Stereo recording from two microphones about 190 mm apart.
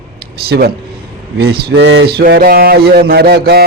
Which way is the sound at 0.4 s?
55° right (ahead or behind).